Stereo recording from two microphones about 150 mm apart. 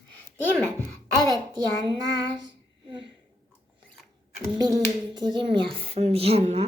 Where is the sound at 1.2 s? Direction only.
25° right (ahead or behind).